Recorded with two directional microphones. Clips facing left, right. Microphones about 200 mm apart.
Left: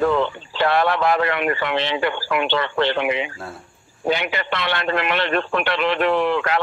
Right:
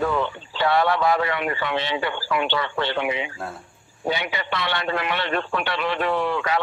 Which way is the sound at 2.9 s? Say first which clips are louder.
Left 3 dB; 75° left (ahead or behind).